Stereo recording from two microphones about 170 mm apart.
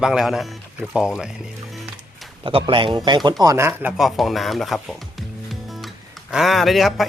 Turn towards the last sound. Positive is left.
turn(degrees=0)  # may be behind; listen again after turning